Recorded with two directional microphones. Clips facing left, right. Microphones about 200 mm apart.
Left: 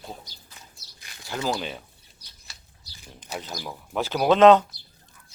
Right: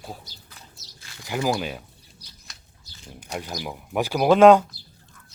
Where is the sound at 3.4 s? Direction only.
10° right (ahead or behind).